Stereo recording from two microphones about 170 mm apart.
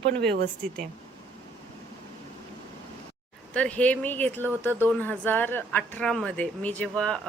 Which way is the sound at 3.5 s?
5° left (ahead or behind).